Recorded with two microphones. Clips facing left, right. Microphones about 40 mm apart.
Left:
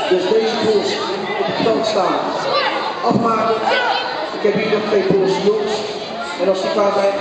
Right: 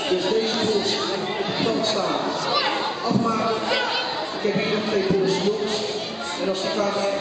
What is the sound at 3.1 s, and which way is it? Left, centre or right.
Speech, left.